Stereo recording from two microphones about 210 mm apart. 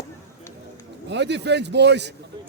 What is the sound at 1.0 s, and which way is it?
A man's voice, 55° right (ahead or behind).